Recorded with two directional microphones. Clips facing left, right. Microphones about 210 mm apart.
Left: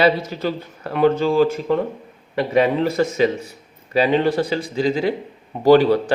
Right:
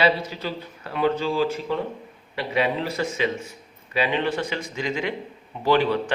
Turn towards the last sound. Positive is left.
turn(degrees=40)  # may be behind; listen again after turning